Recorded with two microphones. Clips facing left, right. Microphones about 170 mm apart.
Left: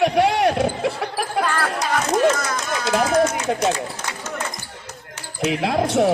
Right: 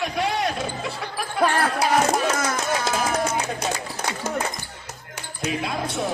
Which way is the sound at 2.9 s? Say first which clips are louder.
Left 11 dB; 70° left (ahead or behind).